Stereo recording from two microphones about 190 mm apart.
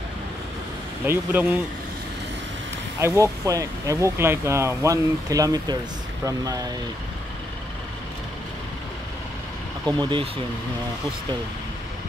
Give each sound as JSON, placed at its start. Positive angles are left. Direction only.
{"t": 1.0, "sound": "speech", "side_deg": -10}
{"t": 3.0, "sound": "speech", "side_deg": -15}
{"t": 9.8, "sound": "speech", "side_deg": -25}